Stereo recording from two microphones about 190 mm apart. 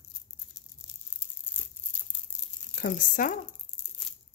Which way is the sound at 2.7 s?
45° left (ahead or behind).